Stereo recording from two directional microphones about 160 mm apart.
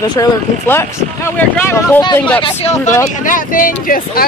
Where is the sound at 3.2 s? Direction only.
55° left (ahead or behind).